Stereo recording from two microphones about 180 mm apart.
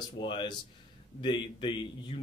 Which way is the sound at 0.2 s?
25° left (ahead or behind).